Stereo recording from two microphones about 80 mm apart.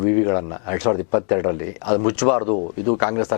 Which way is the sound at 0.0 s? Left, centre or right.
Centre.